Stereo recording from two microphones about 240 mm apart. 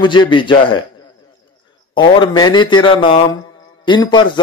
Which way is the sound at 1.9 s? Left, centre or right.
Centre.